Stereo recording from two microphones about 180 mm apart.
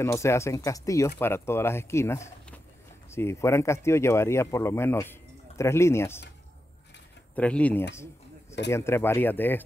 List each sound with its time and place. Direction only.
0.0 s speech: 15° left (ahead or behind)
7.3 s speech: 5° left (ahead or behind)
7.9 s a sound: 15° left (ahead or behind)
8.6 s speech: 15° left (ahead or behind)